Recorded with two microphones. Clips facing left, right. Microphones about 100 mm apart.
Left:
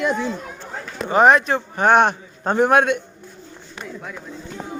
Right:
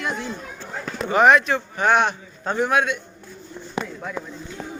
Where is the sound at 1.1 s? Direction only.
35° left (ahead or behind); by 3.0 s 50° left (ahead or behind).